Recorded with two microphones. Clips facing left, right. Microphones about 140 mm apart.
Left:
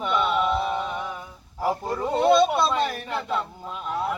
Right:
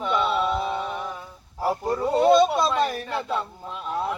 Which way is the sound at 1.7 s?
10° right (ahead or behind).